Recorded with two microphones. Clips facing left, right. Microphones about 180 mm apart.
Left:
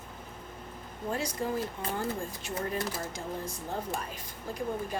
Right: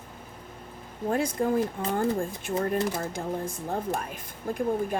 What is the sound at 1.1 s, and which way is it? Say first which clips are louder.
A woman's voice: right 7 dB; 55° right (ahead or behind).